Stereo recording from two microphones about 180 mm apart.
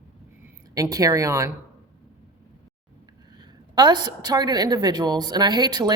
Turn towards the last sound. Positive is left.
turn(degrees=-25)  # may be behind; listen again after turning